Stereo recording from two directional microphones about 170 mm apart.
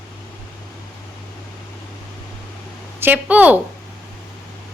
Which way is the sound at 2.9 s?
10° right (ahead or behind).